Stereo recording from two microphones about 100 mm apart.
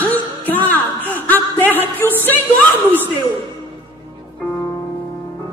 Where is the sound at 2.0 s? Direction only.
20° left (ahead or behind).